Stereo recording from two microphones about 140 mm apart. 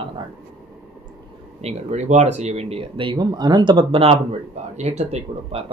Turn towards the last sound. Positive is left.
turn(degrees=-50)  # may be behind; listen again after turning